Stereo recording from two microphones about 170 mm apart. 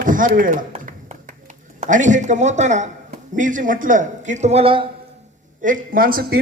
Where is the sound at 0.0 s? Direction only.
50° right (ahead or behind).